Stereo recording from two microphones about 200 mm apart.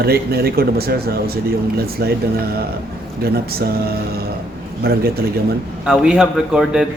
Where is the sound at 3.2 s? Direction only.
50° right (ahead or behind).